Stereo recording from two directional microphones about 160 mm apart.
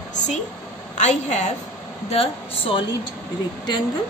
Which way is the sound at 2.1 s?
35° left (ahead or behind).